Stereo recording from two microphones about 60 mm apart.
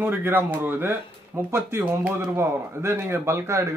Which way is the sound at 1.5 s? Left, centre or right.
Right.